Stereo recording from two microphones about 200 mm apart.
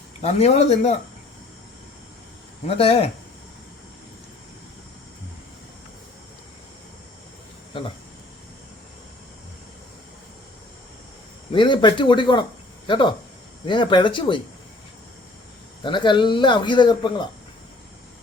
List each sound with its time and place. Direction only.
0.2 s speech: 30° left (ahead or behind)
2.6 s speech: 30° left (ahead or behind)
7.7 s speech: 25° left (ahead or behind)
11.5 s speech: 25° left (ahead or behind)
13.7 s speech: 25° left (ahead or behind)
15.8 s speech: 25° left (ahead or behind)